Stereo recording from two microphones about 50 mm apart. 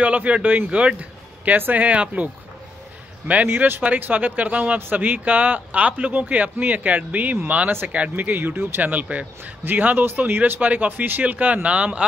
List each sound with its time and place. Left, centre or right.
0.0 s a man's voice: right
0.7 s a man's voice: right
3.4 s speech: right
3.8 s a man's voice: right
4.7 s a man's voice: right
8.3 s speech: right
8.8 s a man's voice: right